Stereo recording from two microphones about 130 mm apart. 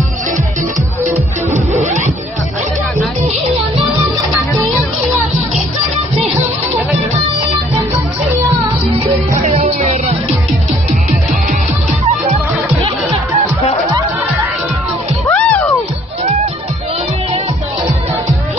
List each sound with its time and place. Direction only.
1.5 s music: 65° right (ahead or behind)
9.7 s music: 60° right (ahead or behind)
15.2 s music: 20° left (ahead or behind)